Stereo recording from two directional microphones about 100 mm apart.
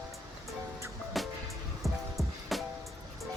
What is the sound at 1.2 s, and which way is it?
Music, centre (ahead or behind).